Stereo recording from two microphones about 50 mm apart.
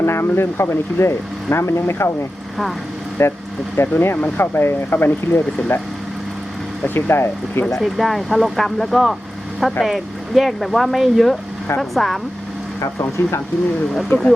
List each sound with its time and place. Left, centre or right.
0.0 s speech: left
3.2 s speech: left
3.8 s speech: left
6.8 s speech: left
7.8 s speech: centre
12.8 s speech: left
13.9 s speech: centre